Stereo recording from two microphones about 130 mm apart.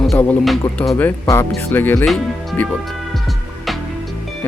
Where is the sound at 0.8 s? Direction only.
10° left (ahead or behind).